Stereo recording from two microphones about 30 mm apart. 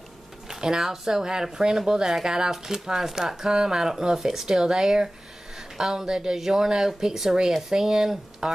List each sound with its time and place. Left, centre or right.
0.5 s speech: centre